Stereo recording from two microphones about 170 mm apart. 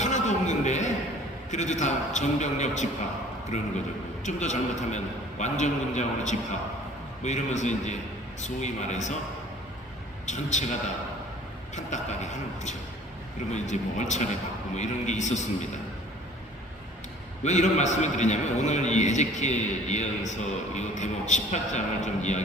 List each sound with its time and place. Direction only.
0.0 s a sound: 45° left (ahead or behind)
1.5 s a man's voice: 45° left (ahead or behind)
4.2 s a man's voice: 45° left (ahead or behind)
10.2 s a man's voice: 45° left (ahead or behind)
11.7 s a man's voice: 45° left (ahead or behind)
17.4 s a man's voice: 40° left (ahead or behind)